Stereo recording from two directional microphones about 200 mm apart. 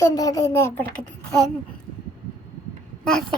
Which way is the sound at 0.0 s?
15° left (ahead or behind).